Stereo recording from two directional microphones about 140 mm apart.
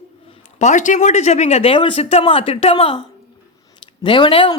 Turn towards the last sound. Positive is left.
turn(degrees=40)  # may be behind; listen again after turning